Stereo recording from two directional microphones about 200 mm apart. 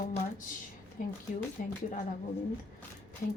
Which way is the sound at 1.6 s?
45° left (ahead or behind).